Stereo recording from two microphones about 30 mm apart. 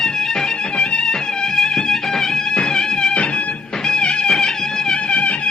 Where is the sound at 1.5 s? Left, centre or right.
Centre.